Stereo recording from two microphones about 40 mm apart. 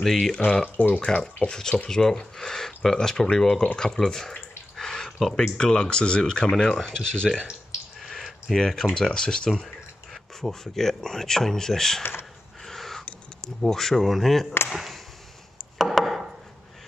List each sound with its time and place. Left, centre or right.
0.0 s speech: centre
0.7 s speech: left
1.2 s speech: centre
3.6 s speech: left
4.0 s speech: centre
4.7 s a sound: centre
5.6 s speech: left
8.2 s a sound: centre
8.5 s speech: centre
12.0 s speech: left
12.6 s a sound: centre
13.6 s speech: centre
15.8 s chopping: centre